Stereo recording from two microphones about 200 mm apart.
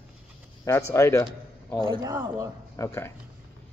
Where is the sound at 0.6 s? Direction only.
15° left (ahead or behind).